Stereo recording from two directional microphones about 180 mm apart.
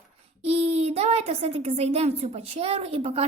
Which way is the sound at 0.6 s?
35° right (ahead or behind).